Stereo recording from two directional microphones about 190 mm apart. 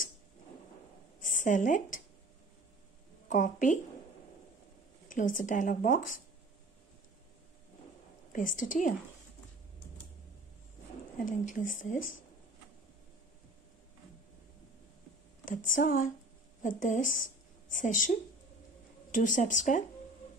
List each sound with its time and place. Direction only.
1.2 s a woman's voice: 45° left (ahead or behind)
3.3 s speech: 40° left (ahead or behind)
5.0 s speech: 45° left (ahead or behind)
8.3 s speech: 45° left (ahead or behind)
11.2 s speech: 45° left (ahead or behind)
15.4 s a woman's voice: 45° left (ahead or behind)
19.1 s speech: 45° left (ahead or behind)